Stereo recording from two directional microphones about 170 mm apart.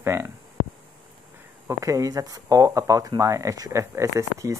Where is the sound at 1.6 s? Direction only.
20° right (ahead or behind).